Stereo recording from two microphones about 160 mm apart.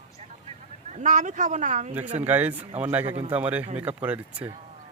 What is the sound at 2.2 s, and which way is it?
Speech, 10° right (ahead or behind).